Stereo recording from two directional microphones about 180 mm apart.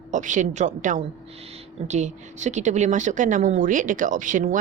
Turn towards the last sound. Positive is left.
turn(degrees=-45)  # may be behind; listen again after turning